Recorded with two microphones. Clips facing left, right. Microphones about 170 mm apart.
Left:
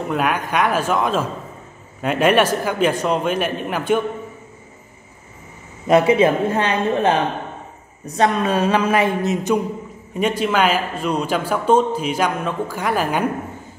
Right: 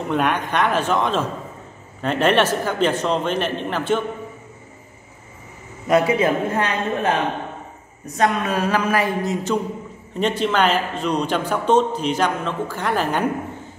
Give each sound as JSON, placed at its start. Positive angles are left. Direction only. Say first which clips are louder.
{"t": 0.1, "sound": "a man's voice", "louder": "even", "side_deg": 5}
{"t": 5.9, "sound": "a man's voice", "louder": "left 3 dB", "side_deg": 25}